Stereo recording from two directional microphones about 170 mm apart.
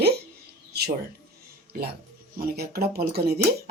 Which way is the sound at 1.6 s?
70° right (ahead or behind).